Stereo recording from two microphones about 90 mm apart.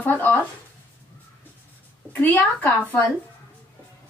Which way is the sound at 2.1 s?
20° left (ahead or behind).